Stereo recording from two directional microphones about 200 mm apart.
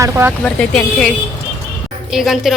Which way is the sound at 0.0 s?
15° right (ahead or behind).